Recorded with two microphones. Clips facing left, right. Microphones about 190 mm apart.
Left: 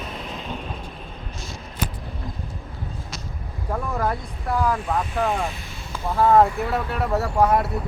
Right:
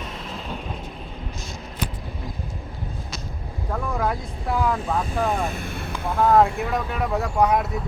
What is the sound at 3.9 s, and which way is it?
Vehicle, 5° right (ahead or behind).